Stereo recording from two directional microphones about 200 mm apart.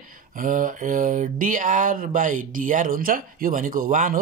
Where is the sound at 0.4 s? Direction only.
40° right (ahead or behind).